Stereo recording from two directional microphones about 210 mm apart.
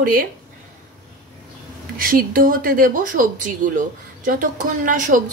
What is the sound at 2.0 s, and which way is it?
Speech, 40° right (ahead or behind).